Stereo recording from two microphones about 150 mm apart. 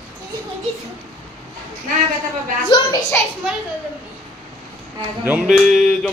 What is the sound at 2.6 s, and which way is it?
Speech, 30° left (ahead or behind).